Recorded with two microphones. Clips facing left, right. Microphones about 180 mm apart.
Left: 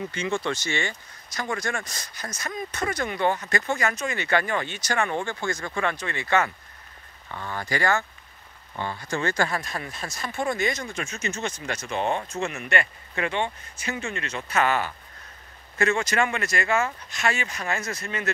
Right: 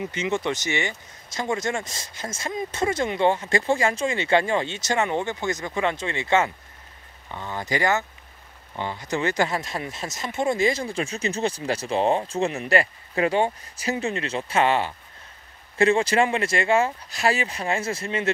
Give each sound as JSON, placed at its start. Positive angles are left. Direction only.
{"t": 0.0, "sound": "speech", "side_deg": -20}